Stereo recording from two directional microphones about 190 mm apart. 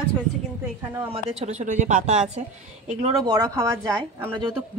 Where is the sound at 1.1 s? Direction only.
35° right (ahead or behind).